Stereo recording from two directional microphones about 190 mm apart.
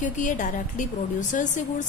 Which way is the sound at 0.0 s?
40° left (ahead or behind).